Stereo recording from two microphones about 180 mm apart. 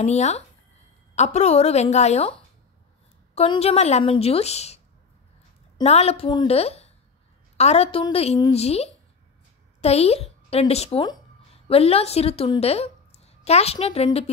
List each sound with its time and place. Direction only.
0.0 s a woman's voice: 40° left (ahead or behind)
3.3 s a woman's voice: 35° left (ahead or behind)
5.9 s a woman's voice: 35° left (ahead or behind)